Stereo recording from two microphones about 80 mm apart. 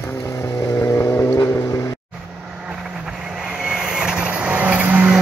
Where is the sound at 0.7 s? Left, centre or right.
Left.